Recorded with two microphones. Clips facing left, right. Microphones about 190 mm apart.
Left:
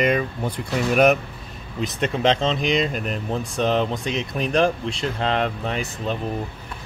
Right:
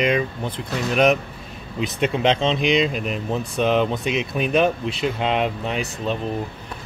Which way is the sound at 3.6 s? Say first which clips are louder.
Right 2 dB; 35° left (ahead or behind).